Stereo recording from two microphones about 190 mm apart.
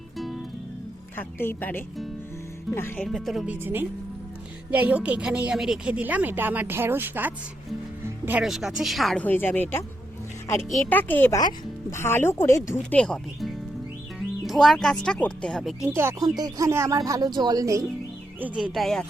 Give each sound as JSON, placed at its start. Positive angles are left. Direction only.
{"t": 1.1, "sound": "speech", "side_deg": 10}
{"t": 10.8, "sound": "speech", "side_deg": 10}
{"t": 16.0, "sound": "speech", "side_deg": -15}
{"t": 18.3, "sound": "speech", "side_deg": -5}